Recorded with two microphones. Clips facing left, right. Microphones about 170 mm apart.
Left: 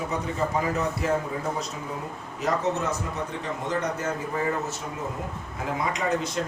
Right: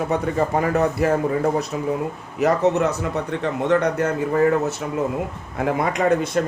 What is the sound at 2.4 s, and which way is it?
Speech, 65° right (ahead or behind).